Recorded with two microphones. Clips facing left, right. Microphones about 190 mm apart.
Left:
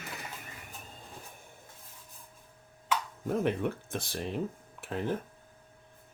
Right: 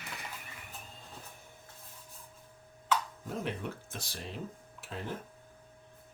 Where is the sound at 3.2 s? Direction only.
55° left (ahead or behind).